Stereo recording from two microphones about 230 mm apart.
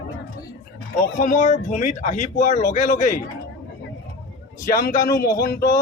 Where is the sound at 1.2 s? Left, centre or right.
Left.